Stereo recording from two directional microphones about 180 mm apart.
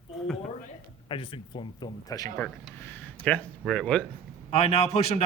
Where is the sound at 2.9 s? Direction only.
10° left (ahead or behind).